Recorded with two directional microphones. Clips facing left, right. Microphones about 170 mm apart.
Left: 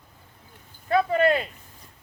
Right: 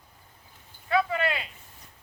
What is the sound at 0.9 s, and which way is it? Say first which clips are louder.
Speech: left 6 dB; 45° left (ahead or behind).